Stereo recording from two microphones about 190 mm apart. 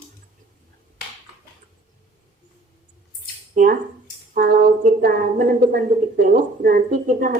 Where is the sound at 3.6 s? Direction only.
40° right (ahead or behind).